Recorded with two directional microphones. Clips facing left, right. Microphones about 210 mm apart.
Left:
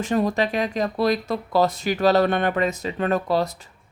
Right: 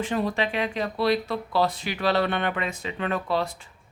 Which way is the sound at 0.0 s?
45° left (ahead or behind).